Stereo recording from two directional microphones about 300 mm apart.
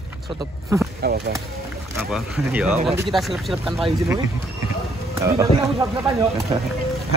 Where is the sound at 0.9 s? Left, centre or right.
Right.